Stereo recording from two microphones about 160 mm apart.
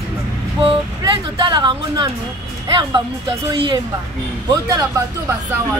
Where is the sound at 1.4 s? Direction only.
30° right (ahead or behind).